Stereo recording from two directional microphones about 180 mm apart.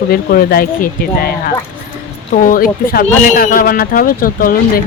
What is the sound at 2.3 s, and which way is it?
Speech, 50° left (ahead or behind).